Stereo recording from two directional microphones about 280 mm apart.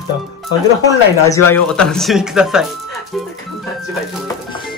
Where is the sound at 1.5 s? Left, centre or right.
Centre.